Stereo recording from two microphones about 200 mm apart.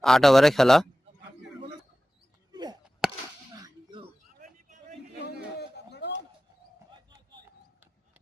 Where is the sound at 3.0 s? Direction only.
5° right (ahead or behind).